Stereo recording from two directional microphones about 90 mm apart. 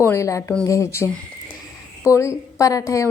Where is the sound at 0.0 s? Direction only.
30° left (ahead or behind).